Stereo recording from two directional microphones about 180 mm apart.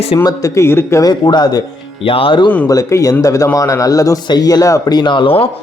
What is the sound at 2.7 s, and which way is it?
A man's voice, 15° left (ahead or behind).